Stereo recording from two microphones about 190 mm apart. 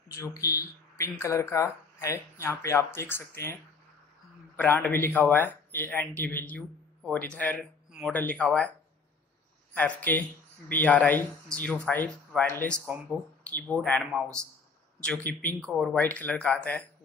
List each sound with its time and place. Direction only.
0.1 s speech: 15° left (ahead or behind)
4.6 s speech: 10° left (ahead or behind)
9.8 s speech: 10° left (ahead or behind)